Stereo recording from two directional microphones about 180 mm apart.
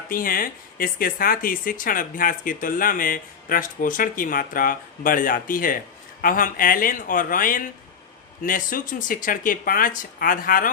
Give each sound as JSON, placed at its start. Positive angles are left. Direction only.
{"t": 0.1, "sound": "speech", "side_deg": 50}